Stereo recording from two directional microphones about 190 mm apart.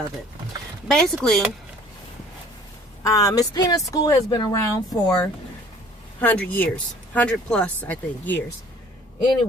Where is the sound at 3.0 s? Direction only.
15° left (ahead or behind).